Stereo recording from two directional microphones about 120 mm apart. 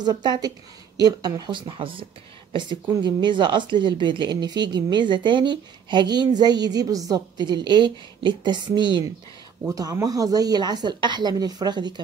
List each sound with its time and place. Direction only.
0.0 s a woman's voice: 35° right (ahead or behind)
9.7 s a woman's voice: 30° right (ahead or behind)